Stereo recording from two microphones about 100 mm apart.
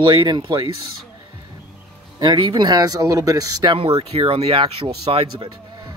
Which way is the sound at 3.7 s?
70° right (ahead or behind).